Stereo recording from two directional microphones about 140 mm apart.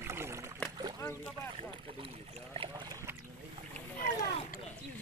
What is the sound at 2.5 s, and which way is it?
Speech, 40° right (ahead or behind).